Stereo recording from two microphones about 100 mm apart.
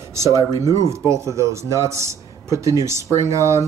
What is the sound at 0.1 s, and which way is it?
Speech, 30° right (ahead or behind).